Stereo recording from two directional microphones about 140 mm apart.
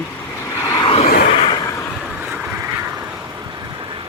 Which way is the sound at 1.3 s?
40° left (ahead or behind).